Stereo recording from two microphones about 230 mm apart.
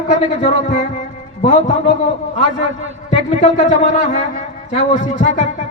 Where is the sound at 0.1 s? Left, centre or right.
Left.